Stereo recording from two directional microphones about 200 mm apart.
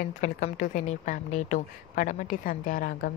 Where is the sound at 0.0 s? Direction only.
40° left (ahead or behind).